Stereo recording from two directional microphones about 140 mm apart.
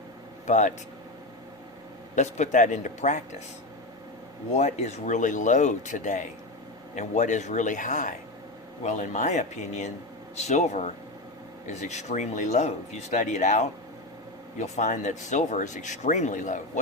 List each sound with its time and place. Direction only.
0.4 s speech: 60° left (ahead or behind)
2.1 s speech: 60° left (ahead or behind)
4.5 s speech: 55° left (ahead or behind)